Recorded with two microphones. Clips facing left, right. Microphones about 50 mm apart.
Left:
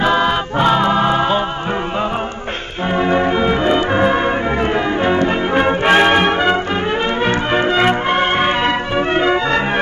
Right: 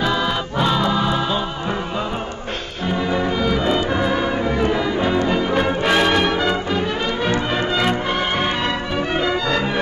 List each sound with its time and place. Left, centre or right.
0.0 s music: left
2.9 s music: left